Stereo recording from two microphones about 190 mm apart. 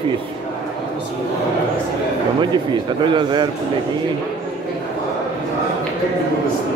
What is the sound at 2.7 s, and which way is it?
Speech, 25° right (ahead or behind).